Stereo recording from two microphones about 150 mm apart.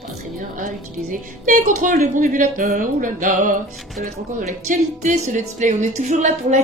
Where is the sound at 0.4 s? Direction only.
65° right (ahead or behind).